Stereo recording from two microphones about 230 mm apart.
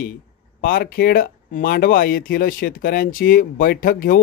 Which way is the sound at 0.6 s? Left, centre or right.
Left.